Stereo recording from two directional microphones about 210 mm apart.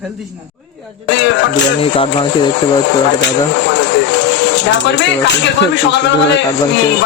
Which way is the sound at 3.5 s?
60° left (ahead or behind).